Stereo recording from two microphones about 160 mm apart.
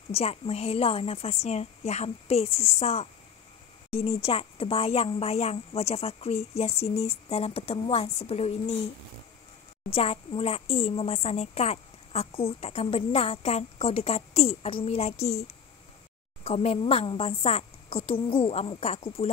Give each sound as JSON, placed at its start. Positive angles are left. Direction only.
{"t": 0.1, "sound": "speech", "side_deg": 40}
{"t": 9.9, "sound": "speech", "side_deg": 35}
{"t": 16.4, "sound": "speech", "side_deg": 40}